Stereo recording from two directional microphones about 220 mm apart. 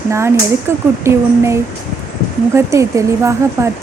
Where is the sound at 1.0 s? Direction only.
10° right (ahead or behind).